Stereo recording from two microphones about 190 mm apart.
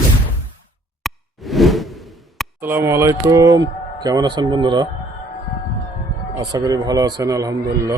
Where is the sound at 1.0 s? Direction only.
Centre (ahead or behind).